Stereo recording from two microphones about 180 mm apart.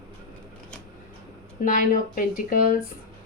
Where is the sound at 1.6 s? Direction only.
50° left (ahead or behind).